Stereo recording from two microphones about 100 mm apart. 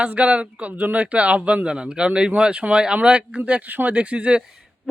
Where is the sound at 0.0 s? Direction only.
10° right (ahead or behind).